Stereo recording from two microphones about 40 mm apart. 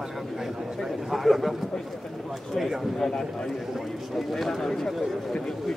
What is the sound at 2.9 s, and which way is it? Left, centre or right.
Speech, centre.